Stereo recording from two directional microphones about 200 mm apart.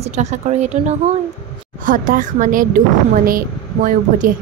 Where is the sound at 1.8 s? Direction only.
40° right (ahead or behind).